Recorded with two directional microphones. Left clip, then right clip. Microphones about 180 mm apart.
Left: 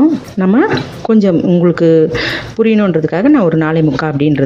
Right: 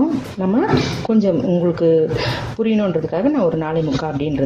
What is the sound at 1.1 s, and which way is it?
Speech, 35° left (ahead or behind).